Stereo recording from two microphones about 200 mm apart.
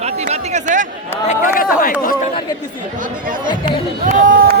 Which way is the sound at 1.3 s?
40° left (ahead or behind).